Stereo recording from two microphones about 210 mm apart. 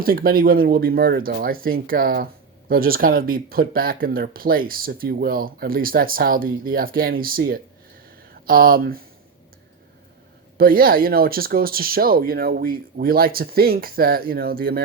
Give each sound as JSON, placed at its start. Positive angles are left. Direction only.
{"t": 0.0, "sound": "speech", "side_deg": -45}
{"t": 10.6, "sound": "speech", "side_deg": -45}